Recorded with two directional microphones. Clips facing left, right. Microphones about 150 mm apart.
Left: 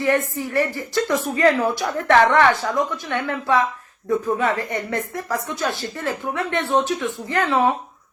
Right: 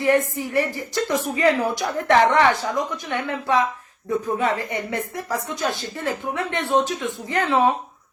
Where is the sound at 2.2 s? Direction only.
20° right (ahead or behind).